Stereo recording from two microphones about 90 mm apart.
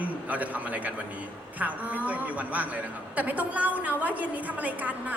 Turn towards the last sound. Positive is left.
turn(degrees=-15)  # may be behind; listen again after turning